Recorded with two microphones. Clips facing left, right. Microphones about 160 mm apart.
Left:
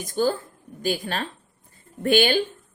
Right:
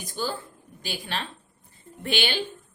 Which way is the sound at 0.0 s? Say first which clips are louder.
Left 8 dB; 45° left (ahead or behind).